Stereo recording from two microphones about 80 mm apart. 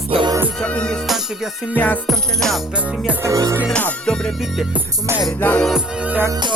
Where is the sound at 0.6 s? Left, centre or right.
Centre.